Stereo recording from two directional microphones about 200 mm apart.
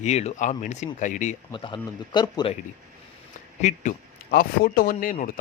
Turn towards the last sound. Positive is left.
turn(degrees=50)  # may be behind; listen again after turning